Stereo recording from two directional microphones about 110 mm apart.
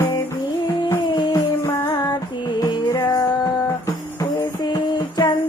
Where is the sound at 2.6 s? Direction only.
40° left (ahead or behind).